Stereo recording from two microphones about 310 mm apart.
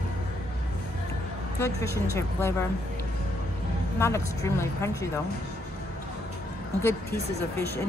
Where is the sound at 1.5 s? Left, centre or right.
Centre.